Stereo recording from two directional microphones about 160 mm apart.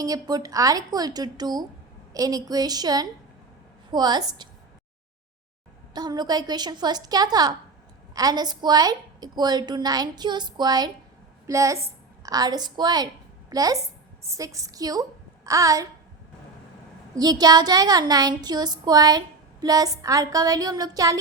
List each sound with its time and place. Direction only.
0.0 s a woman's voice: 25° right (ahead or behind)
5.9 s a woman's voice: 25° right (ahead or behind)
17.2 s a woman's voice: 25° right (ahead or behind)